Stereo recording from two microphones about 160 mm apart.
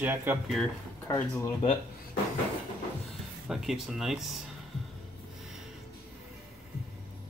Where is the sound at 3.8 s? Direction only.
Centre (ahead or behind).